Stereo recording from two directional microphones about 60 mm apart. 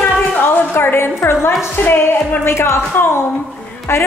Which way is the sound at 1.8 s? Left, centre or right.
Left.